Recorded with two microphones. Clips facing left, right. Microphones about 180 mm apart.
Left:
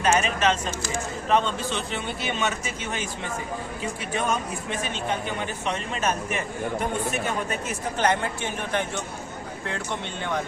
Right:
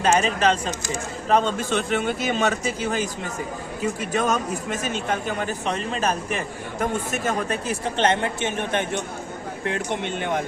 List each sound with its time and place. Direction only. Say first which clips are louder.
0.0 s speech: right 2 dB; 35° right (ahead or behind)
4.1 s a man's voice: right 2 dB; 40° right (ahead or behind); by 10.4 s 20° right (ahead or behind)